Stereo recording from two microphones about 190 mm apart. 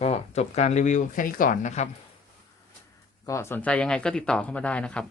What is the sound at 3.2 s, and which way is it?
Speech, 15° left (ahead or behind).